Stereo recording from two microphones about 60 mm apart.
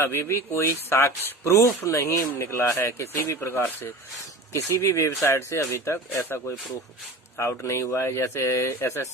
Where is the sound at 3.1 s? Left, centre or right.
Left.